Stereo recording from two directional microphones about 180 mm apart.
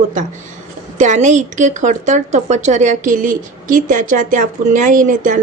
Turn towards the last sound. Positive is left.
turn(degrees=-45)  # may be behind; listen again after turning